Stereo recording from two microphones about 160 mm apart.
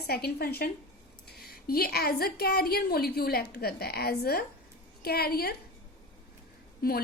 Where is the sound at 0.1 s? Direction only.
75° left (ahead or behind).